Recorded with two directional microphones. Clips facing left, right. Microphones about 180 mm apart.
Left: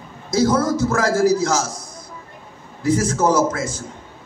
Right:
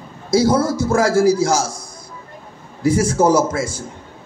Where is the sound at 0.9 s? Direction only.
30° right (ahead or behind).